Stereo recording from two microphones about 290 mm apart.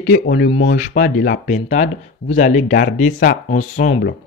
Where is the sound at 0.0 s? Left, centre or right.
Left.